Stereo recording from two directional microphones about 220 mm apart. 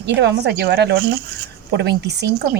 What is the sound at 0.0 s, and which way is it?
Speech, 50° right (ahead or behind).